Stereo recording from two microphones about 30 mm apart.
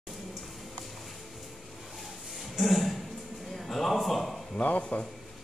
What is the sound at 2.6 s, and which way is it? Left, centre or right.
Music, centre.